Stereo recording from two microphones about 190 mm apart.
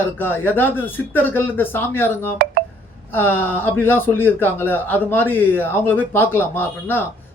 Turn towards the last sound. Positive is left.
turn(degrees=10)  # may be behind; listen again after turning